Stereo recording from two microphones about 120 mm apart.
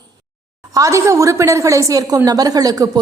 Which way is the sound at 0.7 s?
25° right (ahead or behind).